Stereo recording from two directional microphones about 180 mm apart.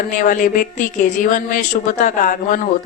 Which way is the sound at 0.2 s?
45° left (ahead or behind).